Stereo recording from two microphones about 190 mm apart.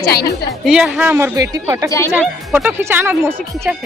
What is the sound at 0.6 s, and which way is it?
Speech, 5° right (ahead or behind).